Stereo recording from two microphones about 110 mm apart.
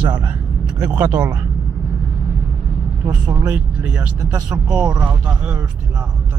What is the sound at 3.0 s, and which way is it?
Speech, 40° right (ahead or behind).